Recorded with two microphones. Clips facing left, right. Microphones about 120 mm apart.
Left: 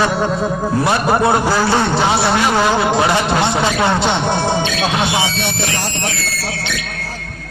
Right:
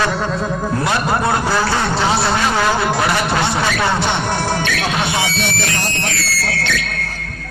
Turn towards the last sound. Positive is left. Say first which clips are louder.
# right 2 dB
turn(degrees=15)  # may be behind; listen again after turning